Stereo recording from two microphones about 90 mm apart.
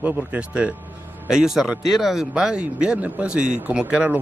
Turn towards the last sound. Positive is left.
turn(degrees=-15)  # may be behind; listen again after turning